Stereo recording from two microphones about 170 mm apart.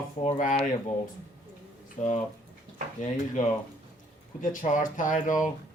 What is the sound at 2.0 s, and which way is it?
Speech, 50° left (ahead or behind).